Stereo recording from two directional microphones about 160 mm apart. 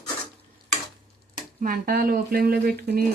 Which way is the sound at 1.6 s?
65° right (ahead or behind).